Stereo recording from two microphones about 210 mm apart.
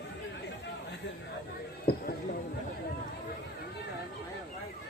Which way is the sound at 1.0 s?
55° left (ahead or behind).